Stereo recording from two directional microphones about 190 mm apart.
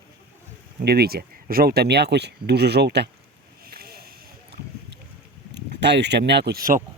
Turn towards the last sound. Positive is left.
turn(degrees=-45)  # may be behind; listen again after turning